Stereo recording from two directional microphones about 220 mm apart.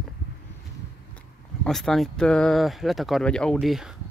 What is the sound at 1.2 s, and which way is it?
Speech, centre (ahead or behind).